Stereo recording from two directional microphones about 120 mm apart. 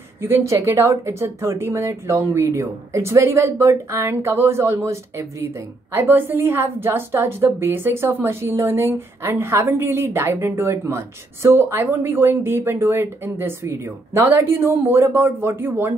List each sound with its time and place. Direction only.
0.2 s speech: 20° right (ahead or behind)